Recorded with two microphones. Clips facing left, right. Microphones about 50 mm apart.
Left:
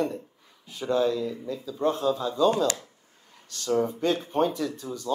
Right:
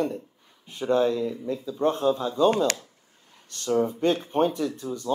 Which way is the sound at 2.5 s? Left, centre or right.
Right.